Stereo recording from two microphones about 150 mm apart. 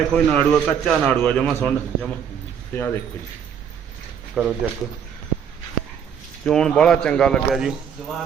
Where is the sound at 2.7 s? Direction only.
15° left (ahead or behind).